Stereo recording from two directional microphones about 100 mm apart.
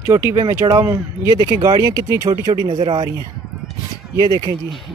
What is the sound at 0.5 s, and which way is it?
Speech, 35° right (ahead or behind).